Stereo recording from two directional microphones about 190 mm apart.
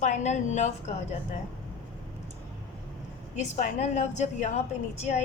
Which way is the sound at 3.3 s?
40° left (ahead or behind).